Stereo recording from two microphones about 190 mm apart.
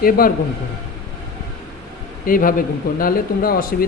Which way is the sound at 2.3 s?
45° left (ahead or behind).